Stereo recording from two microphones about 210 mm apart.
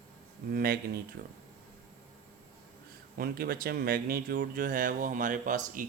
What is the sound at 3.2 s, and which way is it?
Speech, 45° right (ahead or behind).